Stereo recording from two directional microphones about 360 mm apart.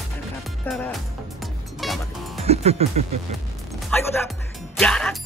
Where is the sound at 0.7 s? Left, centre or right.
Centre.